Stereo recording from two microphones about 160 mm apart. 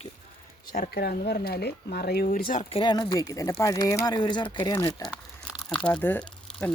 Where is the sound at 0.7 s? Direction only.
65° left (ahead or behind).